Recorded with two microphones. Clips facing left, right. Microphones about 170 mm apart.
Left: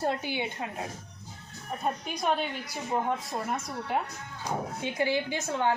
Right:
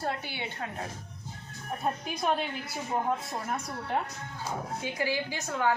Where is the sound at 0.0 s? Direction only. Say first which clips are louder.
Left 4 dB; 15° left (ahead or behind).